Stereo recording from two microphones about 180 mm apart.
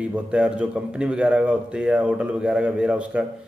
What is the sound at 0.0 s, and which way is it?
A man's voice, 5° right (ahead or behind).